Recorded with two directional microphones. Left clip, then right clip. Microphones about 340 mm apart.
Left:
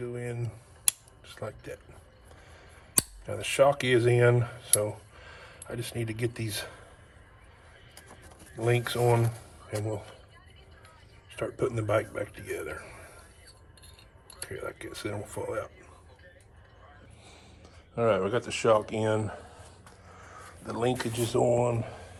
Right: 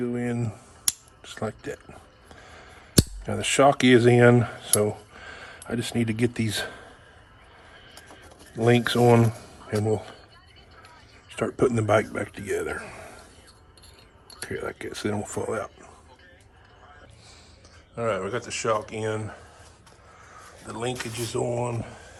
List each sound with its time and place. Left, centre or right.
0.0 s speech: right
2.3 s a sound: right
3.2 s speech: right
8.6 s speech: right
11.3 s a man's voice: right
14.3 s a man's voice: right
17.9 s speech: centre